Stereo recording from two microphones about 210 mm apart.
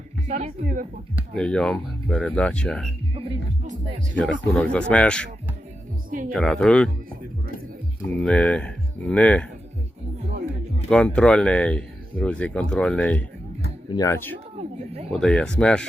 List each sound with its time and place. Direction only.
0.3 s speech: 35° right (ahead or behind)
1.4 s speech: 5° left (ahead or behind)
3.2 s speech: 25° right (ahead or behind)
4.2 s speech: 5° left (ahead or behind)
6.1 s speech: 40° right (ahead or behind)
6.3 s speech: 5° left (ahead or behind)
8.2 s speech: 5° left (ahead or behind)
10.8 s speech: 5° left (ahead or behind)
14.6 s a sound: 30° right (ahead or behind)
15.1 s speech: 5° left (ahead or behind)